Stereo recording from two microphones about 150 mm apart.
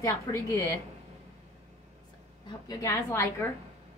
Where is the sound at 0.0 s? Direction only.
20° left (ahead or behind).